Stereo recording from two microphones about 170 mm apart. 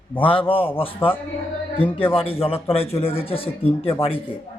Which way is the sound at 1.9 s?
30° left (ahead or behind).